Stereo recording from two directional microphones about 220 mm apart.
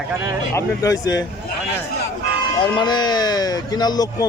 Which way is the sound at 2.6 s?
20° left (ahead or behind).